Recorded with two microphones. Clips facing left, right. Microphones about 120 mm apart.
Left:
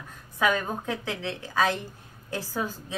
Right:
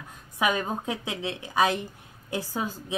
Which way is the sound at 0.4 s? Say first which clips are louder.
Left 1 dB; 15° right (ahead or behind).